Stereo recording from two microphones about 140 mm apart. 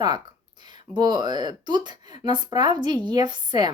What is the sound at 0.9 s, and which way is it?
A woman's voice, 30° right (ahead or behind).